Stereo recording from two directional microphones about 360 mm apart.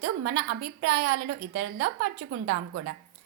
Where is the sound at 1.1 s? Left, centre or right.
Right.